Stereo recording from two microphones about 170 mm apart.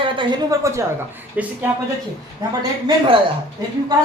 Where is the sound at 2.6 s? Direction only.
25° right (ahead or behind).